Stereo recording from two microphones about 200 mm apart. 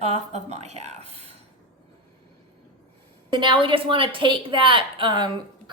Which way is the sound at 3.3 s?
25° right (ahead or behind).